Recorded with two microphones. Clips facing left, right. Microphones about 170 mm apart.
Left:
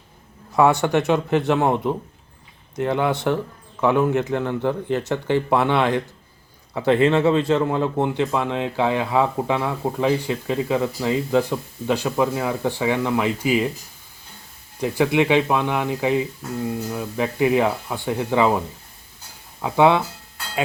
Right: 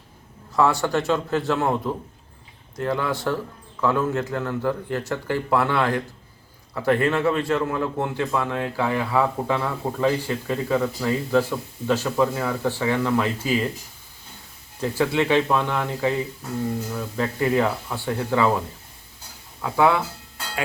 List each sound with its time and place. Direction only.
0.5 s a man's voice: 20° left (ahead or behind)
14.8 s a man's voice: 15° left (ahead or behind)
19.6 s speech: 20° left (ahead or behind)